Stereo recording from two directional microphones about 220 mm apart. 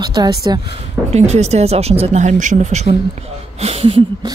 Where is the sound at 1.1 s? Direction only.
30° right (ahead or behind).